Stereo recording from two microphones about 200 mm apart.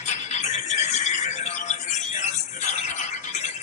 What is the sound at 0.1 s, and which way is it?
Music, 35° left (ahead or behind).